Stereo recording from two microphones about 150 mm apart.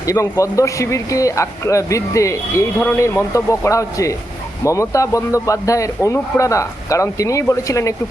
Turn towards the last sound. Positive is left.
turn(degrees=20)  # may be behind; listen again after turning